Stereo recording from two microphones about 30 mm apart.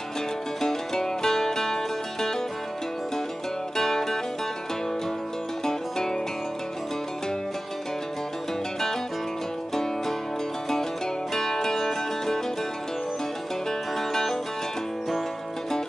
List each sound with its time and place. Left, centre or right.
0.6 s music: centre
3.7 s music: centre
5.7 s music: centre
11.3 s music: centre
13.7 s music: centre